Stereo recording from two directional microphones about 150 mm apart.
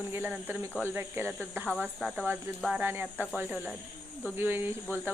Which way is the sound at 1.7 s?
5° left (ahead or behind).